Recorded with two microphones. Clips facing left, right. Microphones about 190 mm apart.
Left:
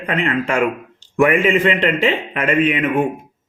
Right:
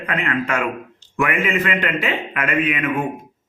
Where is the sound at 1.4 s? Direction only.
30° left (ahead or behind).